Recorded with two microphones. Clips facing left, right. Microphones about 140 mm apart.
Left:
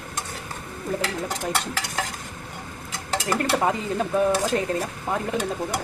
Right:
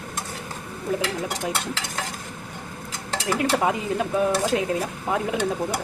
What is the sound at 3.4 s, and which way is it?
Speech, 5° right (ahead or behind).